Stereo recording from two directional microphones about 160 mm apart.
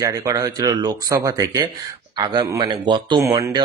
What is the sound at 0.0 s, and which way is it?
Speech, 20° right (ahead or behind).